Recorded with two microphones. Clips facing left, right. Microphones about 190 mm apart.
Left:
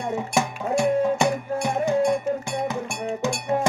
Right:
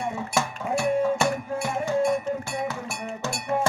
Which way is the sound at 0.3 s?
15° left (ahead or behind).